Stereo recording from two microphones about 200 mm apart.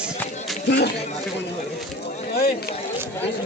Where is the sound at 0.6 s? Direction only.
60° left (ahead or behind).